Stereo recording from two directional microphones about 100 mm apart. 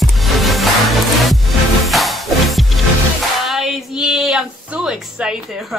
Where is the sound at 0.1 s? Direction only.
Centre (ahead or behind).